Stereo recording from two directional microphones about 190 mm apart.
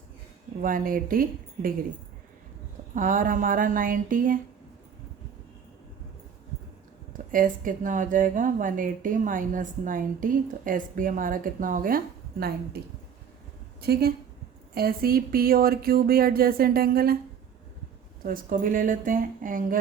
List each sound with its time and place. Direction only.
0.6 s speech: 45° right (ahead or behind)
2.9 s speech: 45° right (ahead or behind)
7.1 s speech: 45° right (ahead or behind)
13.8 s speech: 55° right (ahead or behind)
18.2 s speech: 50° right (ahead or behind)